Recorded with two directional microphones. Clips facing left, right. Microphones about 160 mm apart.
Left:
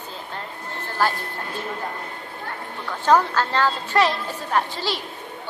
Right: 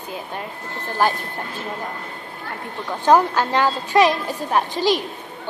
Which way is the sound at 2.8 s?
15° right (ahead or behind).